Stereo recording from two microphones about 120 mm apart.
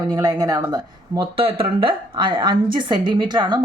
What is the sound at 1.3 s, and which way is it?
A woman's voice, 50° right (ahead or behind).